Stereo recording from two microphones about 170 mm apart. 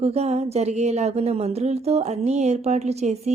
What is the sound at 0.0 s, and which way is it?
Speech, 40° right (ahead or behind).